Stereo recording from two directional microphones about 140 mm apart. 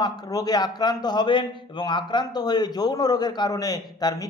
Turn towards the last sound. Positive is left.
turn(degrees=25)  # may be behind; listen again after turning